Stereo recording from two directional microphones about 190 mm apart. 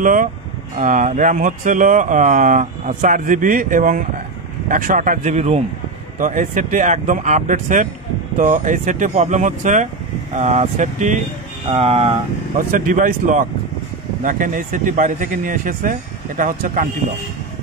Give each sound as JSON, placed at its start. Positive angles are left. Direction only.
{"t": 0.0, "sound": "speech", "side_deg": -45}
{"t": 12.5, "sound": "speech", "side_deg": -45}